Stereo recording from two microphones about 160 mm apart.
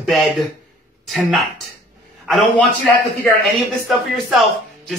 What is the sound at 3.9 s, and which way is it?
Speech, centre (ahead or behind).